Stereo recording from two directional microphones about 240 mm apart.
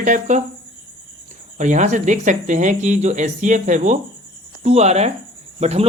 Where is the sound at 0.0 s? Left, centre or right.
Right.